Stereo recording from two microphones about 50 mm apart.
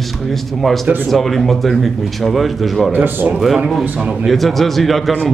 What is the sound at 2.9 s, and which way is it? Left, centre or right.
Speech, right.